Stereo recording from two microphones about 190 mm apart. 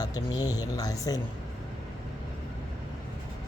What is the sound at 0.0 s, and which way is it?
A man's voice, 20° left (ahead or behind).